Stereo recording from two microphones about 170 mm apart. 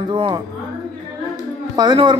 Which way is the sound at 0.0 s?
30° right (ahead or behind).